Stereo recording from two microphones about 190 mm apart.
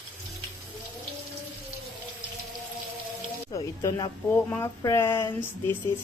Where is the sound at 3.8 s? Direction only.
20° left (ahead or behind).